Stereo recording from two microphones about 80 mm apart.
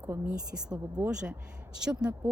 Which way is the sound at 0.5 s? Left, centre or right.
Centre.